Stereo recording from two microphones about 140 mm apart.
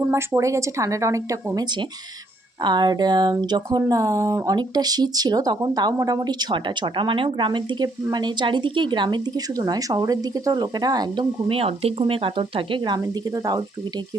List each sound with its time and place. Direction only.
0.1 s a woman's voice: 20° right (ahead or behind)
11.4 s speech: 45° right (ahead or behind); by 13.7 s 25° right (ahead or behind)